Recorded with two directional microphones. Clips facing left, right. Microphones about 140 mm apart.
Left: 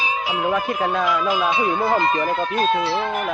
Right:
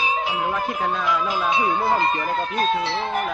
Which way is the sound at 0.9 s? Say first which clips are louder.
Left 3 dB; 60° left (ahead or behind).